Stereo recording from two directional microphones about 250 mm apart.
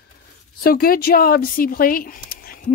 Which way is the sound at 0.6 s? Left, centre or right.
Left.